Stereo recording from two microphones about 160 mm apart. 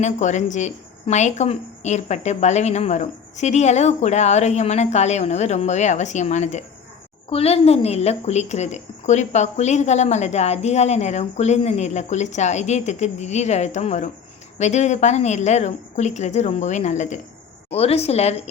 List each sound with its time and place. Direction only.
0.0 s a woman's voice: 50° left (ahead or behind)